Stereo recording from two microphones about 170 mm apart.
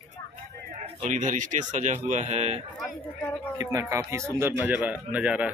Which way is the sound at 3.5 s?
20° right (ahead or behind).